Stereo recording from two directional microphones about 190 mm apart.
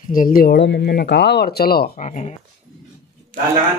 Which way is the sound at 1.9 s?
40° left (ahead or behind).